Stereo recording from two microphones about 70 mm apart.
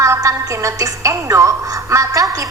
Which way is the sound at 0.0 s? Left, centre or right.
Right.